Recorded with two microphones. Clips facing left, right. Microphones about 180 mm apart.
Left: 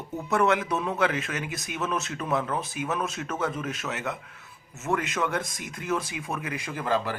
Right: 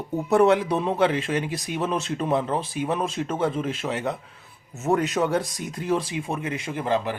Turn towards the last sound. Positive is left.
turn(degrees=-20)  # may be behind; listen again after turning